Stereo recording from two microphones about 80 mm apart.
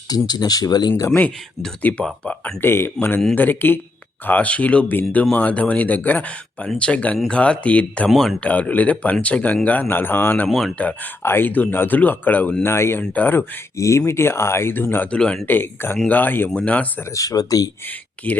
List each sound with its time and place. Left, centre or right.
0.3 s speech: left
1.8 s speech: left
8.1 s speech: centre
8.4 s speech: centre
10.5 s speech: centre
11.2 s speech: left
13.7 s speech: left
15.1 s speech: centre
15.4 s speech: left
17.2 s speech: left
18.2 s speech: centre